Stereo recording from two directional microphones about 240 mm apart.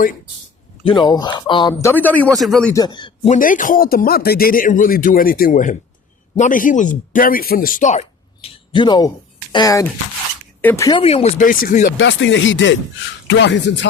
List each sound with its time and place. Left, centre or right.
0.9 s speech: centre
2.7 s a man's voice: centre
3.3 s speech: left
11.9 s speech: left